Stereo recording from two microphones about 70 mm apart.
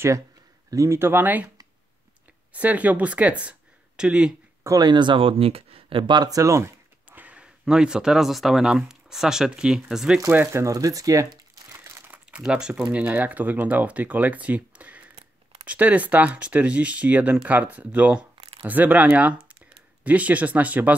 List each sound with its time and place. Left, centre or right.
0.7 s speech: right
0.9 s speech: right
2.5 s speech: right
4.6 s speech: right
6.0 s speech: right
6.3 s speech: right
7.1 s speech: right
10.3 s speech: right
10.6 s speech: right
11.7 s crumpling: right
12.4 s speech: centre
12.9 s speech: right